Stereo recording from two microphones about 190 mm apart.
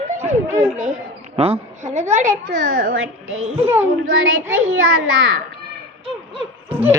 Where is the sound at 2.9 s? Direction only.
90° right.